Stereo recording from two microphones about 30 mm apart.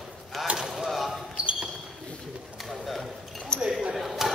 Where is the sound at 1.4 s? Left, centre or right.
Right.